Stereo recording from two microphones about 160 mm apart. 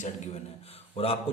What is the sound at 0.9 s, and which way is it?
Speech, 35° left (ahead or behind).